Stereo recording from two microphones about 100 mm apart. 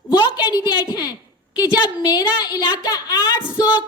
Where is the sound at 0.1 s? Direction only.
45° left (ahead or behind).